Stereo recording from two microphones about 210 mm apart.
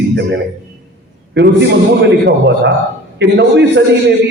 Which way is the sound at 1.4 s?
55° right (ahead or behind).